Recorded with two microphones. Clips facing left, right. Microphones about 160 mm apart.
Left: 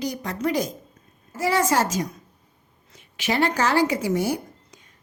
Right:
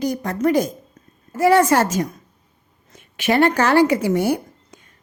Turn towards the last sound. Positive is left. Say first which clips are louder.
# right 2 dB
turn(degrees=-55)  # may be behind; listen again after turning